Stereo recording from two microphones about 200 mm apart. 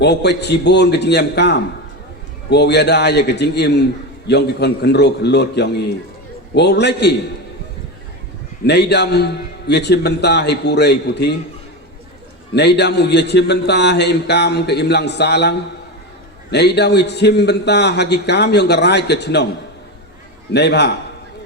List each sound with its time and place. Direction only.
0.0 s a man's voice: 55° left (ahead or behind)
8.6 s a man's voice: 55° left (ahead or behind)
12.5 s a man's voice: 55° left (ahead or behind)
20.5 s a man's voice: 55° left (ahead or behind)